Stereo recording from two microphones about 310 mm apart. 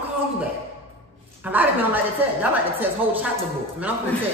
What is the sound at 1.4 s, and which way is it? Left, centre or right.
A woman's voice, centre.